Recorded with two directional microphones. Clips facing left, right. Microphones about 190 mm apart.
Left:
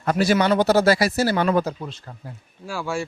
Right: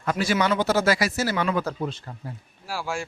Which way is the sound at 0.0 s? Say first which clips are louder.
Left 4 dB; 40° left (ahead or behind).